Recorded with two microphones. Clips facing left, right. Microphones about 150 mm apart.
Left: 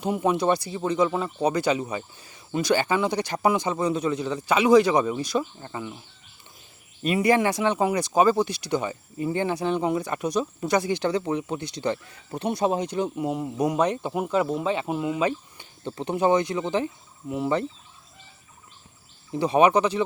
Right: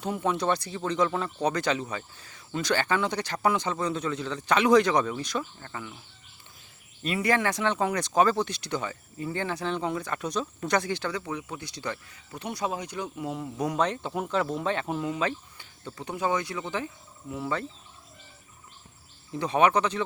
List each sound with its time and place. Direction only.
0.0 s speech: 10° left (ahead or behind)
7.0 s speech: 15° left (ahead or behind)
19.5 s speech: 10° left (ahead or behind)